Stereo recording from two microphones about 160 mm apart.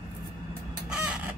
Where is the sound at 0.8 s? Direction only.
5° right (ahead or behind).